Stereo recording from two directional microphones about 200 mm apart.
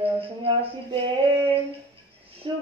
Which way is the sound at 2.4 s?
25° right (ahead or behind).